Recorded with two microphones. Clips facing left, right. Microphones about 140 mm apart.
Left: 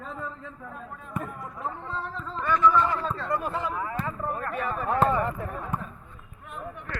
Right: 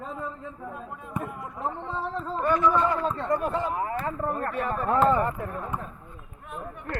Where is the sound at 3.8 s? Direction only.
35° right (ahead or behind).